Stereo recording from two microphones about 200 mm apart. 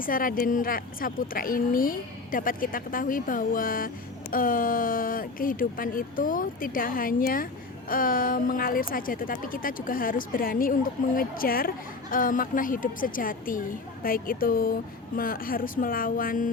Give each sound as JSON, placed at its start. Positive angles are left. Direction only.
{"t": 0.0, "sound": "a woman's voice", "side_deg": 45}